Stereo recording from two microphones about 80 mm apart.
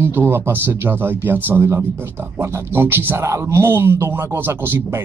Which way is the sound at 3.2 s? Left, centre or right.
Right.